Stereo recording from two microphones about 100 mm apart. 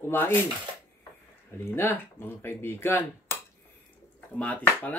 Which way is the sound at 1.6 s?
25° left (ahead or behind).